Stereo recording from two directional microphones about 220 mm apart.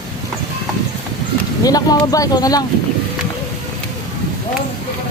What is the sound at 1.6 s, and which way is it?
A woman's voice, 15° left (ahead or behind).